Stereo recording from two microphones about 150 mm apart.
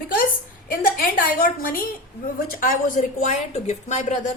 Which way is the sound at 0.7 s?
70° left (ahead or behind).